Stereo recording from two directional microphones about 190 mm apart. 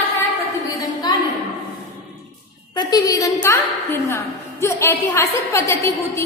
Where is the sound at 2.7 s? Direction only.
20° left (ahead or behind).